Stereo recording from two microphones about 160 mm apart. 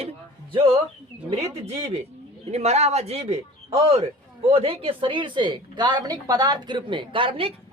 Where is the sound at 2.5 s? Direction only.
40° right (ahead or behind).